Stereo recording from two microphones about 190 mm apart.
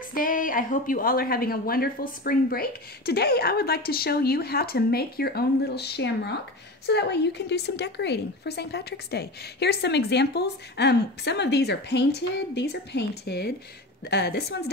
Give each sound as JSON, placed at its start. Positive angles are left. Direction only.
{"t": 0.1, "sound": "a woman's voice", "side_deg": 45}